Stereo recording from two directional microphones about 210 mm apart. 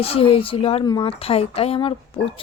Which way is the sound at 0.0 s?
25° left (ahead or behind).